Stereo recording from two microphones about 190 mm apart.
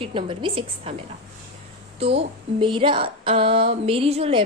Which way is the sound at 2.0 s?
30° right (ahead or behind).